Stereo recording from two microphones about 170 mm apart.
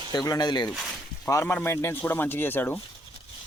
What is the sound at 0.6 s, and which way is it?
Speech, centre (ahead or behind).